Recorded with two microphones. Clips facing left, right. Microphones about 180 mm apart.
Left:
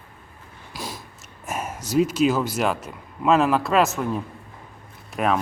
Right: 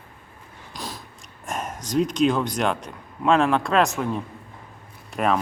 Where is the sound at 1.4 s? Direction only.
5° left (ahead or behind).